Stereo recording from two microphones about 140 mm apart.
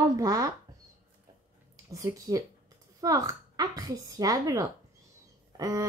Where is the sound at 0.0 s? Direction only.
25° right (ahead or behind).